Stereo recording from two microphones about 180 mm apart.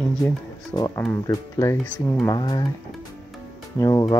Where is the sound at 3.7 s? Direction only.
20° left (ahead or behind).